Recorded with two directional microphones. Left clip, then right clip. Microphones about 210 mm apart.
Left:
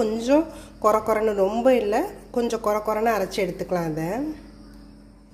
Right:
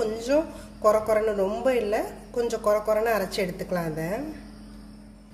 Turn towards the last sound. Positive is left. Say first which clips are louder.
# left 3 dB
turn(degrees=35)  # may be behind; listen again after turning